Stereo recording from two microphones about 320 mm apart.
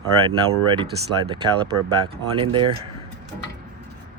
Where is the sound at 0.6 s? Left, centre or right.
Centre.